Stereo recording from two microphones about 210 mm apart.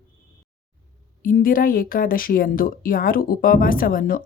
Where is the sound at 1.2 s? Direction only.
40° left (ahead or behind).